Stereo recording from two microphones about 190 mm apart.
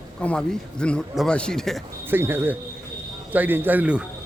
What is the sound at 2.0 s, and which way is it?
A man's voice, 10° right (ahead or behind).